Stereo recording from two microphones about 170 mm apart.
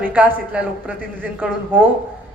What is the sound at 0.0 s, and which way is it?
A woman's voice, 10° right (ahead or behind).